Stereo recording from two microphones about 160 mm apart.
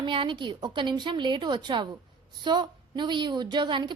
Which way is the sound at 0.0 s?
30° right (ahead or behind).